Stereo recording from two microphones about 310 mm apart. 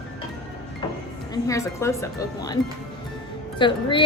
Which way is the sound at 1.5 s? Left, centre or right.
Centre.